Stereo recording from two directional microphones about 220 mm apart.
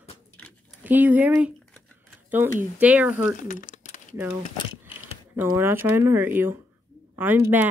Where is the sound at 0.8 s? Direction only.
10° right (ahead or behind).